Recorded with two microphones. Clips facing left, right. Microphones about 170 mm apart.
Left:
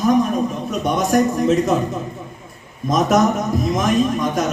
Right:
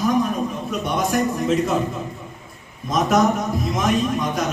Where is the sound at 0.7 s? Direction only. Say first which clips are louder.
Left 4 dB; 45° left (ahead or behind).